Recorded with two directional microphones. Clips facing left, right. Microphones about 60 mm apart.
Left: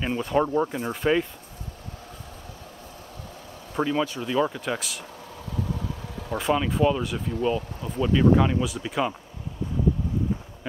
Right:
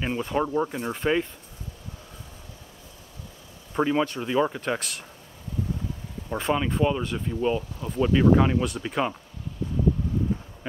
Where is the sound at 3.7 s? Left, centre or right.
Centre.